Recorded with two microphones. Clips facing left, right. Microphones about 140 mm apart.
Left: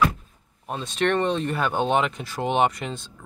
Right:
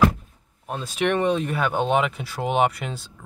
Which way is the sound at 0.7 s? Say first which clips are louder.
Even; 5° right (ahead or behind).